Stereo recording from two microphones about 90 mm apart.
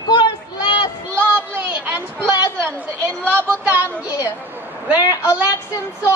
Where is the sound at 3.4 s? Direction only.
25° right (ahead or behind).